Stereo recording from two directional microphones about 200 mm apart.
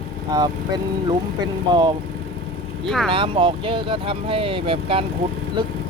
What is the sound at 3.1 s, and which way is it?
Speech, 25° right (ahead or behind).